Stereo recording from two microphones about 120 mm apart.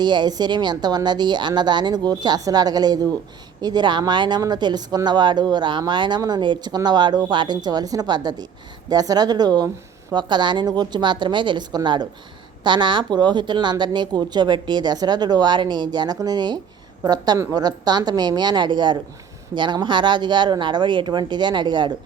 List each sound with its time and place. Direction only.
0.0 s speech: 40° right (ahead or behind)